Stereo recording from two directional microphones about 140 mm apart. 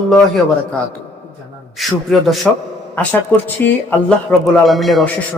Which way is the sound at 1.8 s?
Centre (ahead or behind).